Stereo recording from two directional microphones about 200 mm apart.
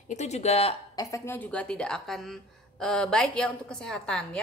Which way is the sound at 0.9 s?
15° left (ahead or behind).